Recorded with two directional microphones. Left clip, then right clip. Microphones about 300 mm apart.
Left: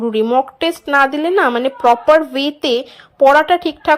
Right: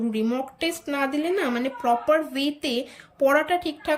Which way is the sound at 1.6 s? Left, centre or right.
Left.